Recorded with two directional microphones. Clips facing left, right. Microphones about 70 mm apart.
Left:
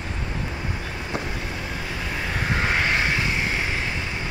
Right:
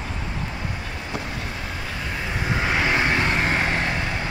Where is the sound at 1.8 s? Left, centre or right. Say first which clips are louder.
Even; centre.